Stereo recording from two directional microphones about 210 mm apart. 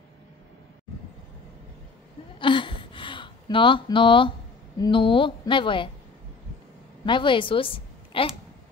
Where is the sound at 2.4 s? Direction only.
25° left (ahead or behind).